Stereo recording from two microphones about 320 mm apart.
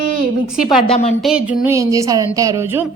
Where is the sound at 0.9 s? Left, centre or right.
Left.